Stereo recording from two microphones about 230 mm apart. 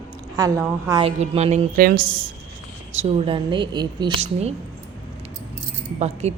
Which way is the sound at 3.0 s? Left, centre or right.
Right.